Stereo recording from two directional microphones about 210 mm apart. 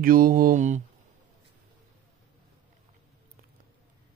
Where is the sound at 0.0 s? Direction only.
40° right (ahead or behind).